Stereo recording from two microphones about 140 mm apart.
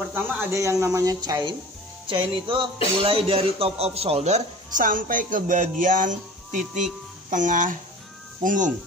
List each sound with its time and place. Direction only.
0.1 s speech: 20° right (ahead or behind)
2.0 s music: 35° right (ahead or behind)
3.0 s a man's voice: 40° right (ahead or behind); by 8.7 s 65° right (ahead or behind)